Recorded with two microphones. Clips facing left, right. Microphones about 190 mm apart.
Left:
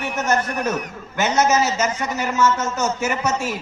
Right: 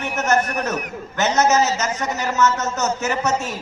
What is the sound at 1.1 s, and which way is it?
A woman's voice, 10° left (ahead or behind).